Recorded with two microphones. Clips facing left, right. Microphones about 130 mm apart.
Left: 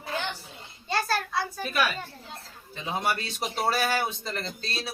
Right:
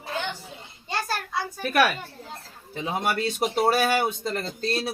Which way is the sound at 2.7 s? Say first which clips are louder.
Right 3 dB; 55° right (ahead or behind).